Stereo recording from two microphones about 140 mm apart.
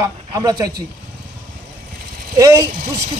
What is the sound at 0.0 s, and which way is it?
Speech, 25° right (ahead or behind).